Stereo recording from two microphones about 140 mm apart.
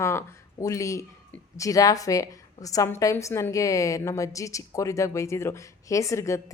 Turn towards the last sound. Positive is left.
turn(degrees=20)  # may be behind; listen again after turning